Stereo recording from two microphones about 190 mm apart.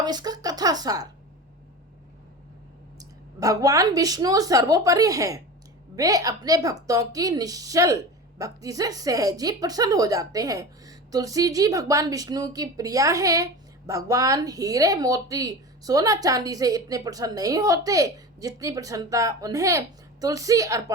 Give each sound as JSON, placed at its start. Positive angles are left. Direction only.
{"t": 0.0, "sound": "a woman's voice", "side_deg": -20}
{"t": 3.0, "sound": "a woman's voice", "side_deg": -20}